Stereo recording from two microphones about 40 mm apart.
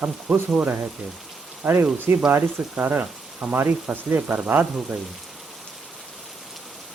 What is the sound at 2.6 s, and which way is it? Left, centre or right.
Speech, right.